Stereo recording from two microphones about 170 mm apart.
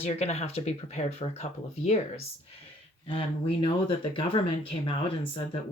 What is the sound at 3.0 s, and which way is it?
Speech, 30° left (ahead or behind).